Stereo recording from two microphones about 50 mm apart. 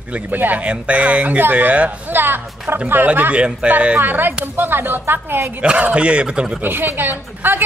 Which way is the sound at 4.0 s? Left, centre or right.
Right.